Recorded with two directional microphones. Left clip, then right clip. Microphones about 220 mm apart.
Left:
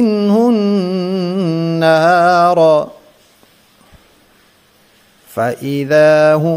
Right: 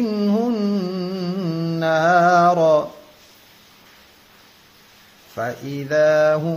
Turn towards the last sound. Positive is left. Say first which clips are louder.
# left 6 dB
turn(degrees=45)  # may be behind; listen again after turning